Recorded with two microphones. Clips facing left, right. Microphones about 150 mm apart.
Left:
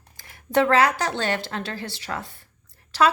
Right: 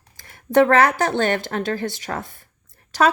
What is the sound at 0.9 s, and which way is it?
Speech, 50° right (ahead or behind).